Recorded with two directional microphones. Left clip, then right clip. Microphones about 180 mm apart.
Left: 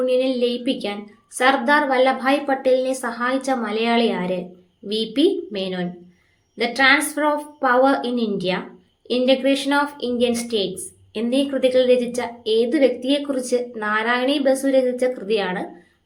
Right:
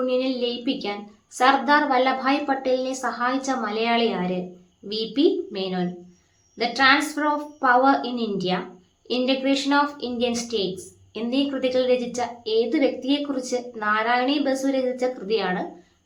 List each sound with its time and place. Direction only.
0.0 s a woman's voice: 10° left (ahead or behind)